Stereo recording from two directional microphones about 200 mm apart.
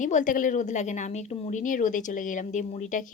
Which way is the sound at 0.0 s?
40° left (ahead or behind).